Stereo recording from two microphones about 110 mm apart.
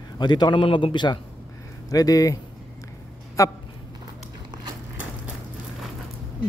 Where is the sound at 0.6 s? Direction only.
50° left (ahead or behind); by 3.5 s 30° left (ahead or behind).